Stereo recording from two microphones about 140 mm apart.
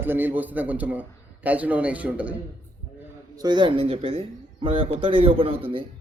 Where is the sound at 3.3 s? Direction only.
30° right (ahead or behind).